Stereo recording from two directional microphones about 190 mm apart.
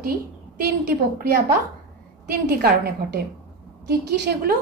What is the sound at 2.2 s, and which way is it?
Speech, 55° right (ahead or behind).